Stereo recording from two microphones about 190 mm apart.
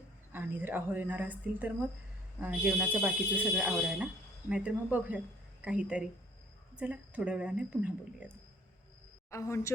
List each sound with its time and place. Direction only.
0.3 s speech: 10° right (ahead or behind)
9.3 s speech: 15° left (ahead or behind)